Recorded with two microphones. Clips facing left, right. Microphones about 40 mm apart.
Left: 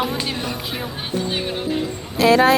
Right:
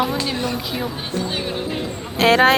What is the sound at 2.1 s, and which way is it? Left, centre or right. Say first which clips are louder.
Speech: even; right.